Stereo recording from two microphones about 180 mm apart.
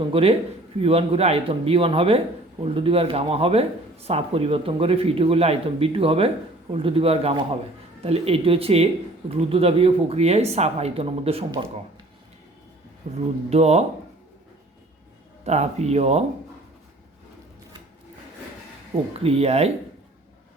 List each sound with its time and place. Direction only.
0.0 s speech: 30° right (ahead or behind)
13.0 s speech: 45° right (ahead or behind)
15.4 s speech: 40° right (ahead or behind)
19.2 s speech: 35° right (ahead or behind)